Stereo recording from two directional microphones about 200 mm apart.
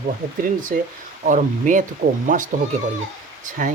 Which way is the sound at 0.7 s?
45° right (ahead or behind).